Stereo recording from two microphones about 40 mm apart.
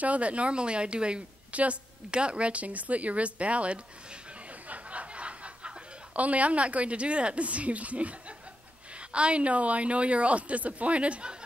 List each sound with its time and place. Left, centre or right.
0.0 s a woman's voice: right
4.6 s a sound: right
6.1 s a woman's voice: right
9.1 s a woman's voice: right